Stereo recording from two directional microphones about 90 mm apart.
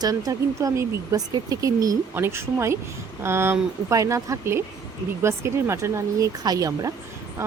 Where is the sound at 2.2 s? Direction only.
30° right (ahead or behind).